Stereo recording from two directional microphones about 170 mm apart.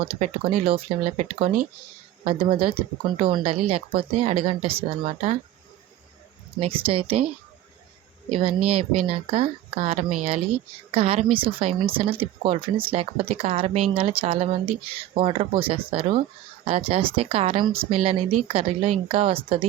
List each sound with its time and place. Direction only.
0.0 s speech: 35° right (ahead or behind)
6.6 s speech: 30° right (ahead or behind)
8.4 s speech: 35° right (ahead or behind)